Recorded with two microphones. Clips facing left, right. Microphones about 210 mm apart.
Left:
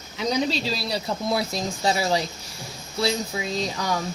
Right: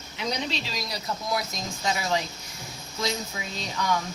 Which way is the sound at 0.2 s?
35° left (ahead or behind).